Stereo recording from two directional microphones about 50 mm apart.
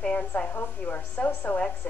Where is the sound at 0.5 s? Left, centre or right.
Left.